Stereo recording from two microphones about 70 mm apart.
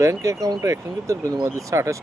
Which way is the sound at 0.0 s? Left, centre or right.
Right.